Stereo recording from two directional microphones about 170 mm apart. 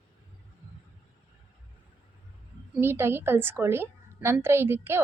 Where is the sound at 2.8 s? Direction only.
15° right (ahead or behind).